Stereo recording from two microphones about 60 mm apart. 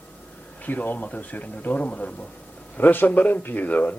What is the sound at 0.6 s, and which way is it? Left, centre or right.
A man's voice, left.